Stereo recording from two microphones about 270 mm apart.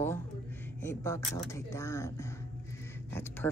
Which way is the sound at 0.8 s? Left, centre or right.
Centre.